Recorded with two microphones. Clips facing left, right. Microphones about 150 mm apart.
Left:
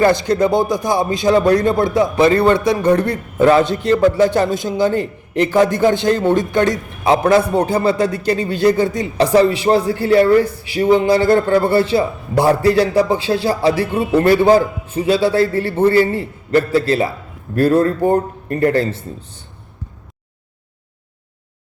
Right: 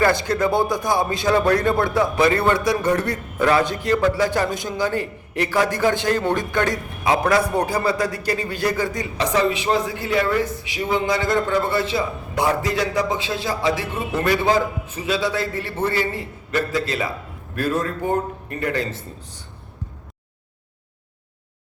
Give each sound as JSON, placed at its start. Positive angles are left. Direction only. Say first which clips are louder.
{"t": 0.0, "sound": "a man's voice", "louder": "left 5 dB", "side_deg": 20}